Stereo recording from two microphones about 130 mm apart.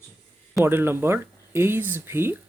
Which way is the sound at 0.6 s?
20° right (ahead or behind).